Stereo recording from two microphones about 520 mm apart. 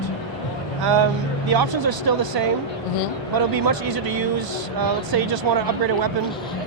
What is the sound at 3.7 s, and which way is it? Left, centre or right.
Speech, right.